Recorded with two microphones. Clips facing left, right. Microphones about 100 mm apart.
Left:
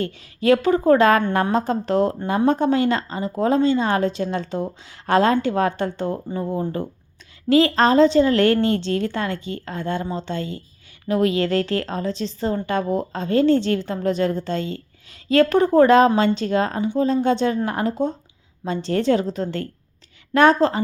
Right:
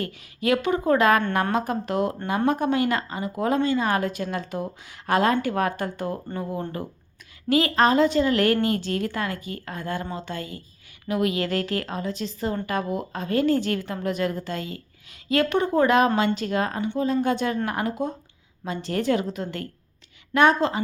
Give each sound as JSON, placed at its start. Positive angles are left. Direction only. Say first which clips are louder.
{"t": 0.0, "sound": "a woman's voice", "louder": "left 5 dB", "side_deg": 30}
{"t": 7.5, "sound": "a woman's voice", "louder": "left 4 dB", "side_deg": 30}